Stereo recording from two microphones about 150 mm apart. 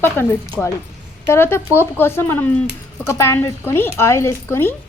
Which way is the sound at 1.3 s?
15° left (ahead or behind).